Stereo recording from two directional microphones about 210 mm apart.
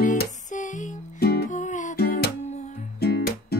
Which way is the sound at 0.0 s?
35° left (ahead or behind).